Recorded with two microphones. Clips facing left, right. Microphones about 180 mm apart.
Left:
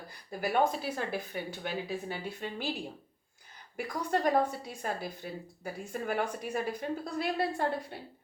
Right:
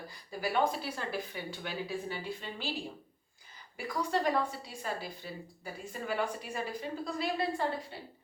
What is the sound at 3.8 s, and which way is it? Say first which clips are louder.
Speech: left 1 dB; 50° left (ahead or behind).